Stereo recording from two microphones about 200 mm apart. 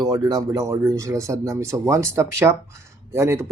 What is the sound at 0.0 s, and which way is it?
Speech, 20° right (ahead or behind).